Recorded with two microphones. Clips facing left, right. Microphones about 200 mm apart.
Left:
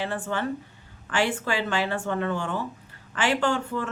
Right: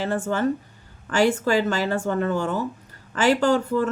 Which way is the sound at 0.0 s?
40° right (ahead or behind).